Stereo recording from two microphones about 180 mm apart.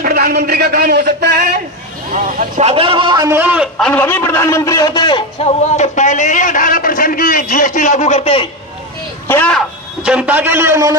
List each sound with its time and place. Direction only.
0.0 s a man's voice: 55° right (ahead or behind)
2.1 s speech: 45° right (ahead or behind)
2.7 s a man's voice: 30° right (ahead or behind); by 5.5 s 25° left (ahead or behind)
5.7 s a man's voice: 40° left (ahead or behind)
9.3 s a man's voice: 5° left (ahead or behind); by 11.0 s 15° right (ahead or behind)